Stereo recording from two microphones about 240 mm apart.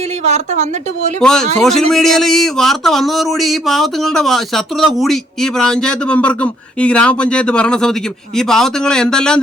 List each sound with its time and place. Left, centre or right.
0.3 s a woman's voice: right
1.2 s a man's voice: centre